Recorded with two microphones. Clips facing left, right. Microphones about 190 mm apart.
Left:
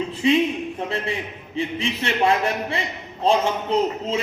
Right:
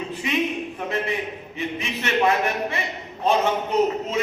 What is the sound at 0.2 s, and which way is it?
Speech, 30° left (ahead or behind).